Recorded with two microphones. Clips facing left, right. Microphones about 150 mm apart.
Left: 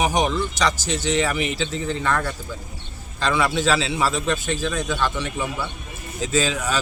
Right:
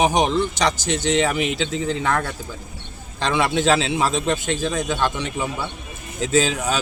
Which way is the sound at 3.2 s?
20° right (ahead or behind).